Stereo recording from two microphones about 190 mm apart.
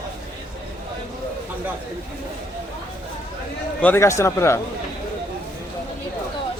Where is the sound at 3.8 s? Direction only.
15° left (ahead or behind).